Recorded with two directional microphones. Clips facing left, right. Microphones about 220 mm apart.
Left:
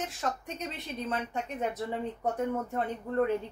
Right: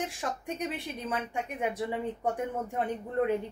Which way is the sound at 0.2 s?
15° right (ahead or behind).